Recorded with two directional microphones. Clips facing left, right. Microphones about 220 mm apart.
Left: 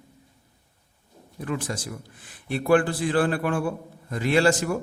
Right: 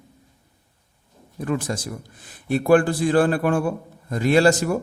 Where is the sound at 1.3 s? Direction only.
45° right (ahead or behind).